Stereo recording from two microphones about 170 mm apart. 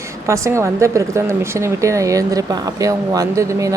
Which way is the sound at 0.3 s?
15° right (ahead or behind).